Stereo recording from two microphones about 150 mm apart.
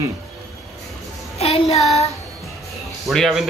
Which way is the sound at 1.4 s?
40° left (ahead or behind).